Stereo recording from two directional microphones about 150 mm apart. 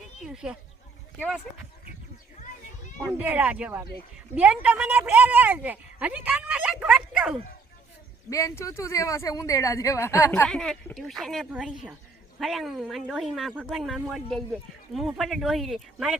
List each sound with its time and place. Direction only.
3.1 s a woman's voice: 15° right (ahead or behind)
8.3 s speech: 20° left (ahead or behind)
10.5 s speech: 5° left (ahead or behind)